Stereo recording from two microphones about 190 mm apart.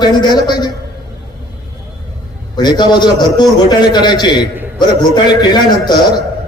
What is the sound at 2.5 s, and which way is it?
A man's voice, 20° left (ahead or behind).